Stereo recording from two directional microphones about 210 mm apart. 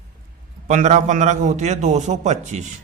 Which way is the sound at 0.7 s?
35° right (ahead or behind).